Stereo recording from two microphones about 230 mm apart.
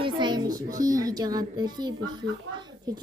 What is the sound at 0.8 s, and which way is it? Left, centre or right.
A woman's voice, centre.